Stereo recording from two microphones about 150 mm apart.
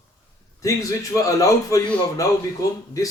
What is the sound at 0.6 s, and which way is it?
A man's voice, 20° left (ahead or behind).